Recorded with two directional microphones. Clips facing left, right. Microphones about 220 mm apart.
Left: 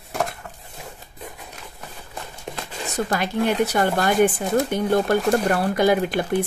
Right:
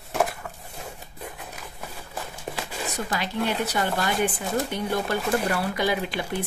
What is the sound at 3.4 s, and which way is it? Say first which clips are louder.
Speech: left 7 dB; 50° left (ahead or behind).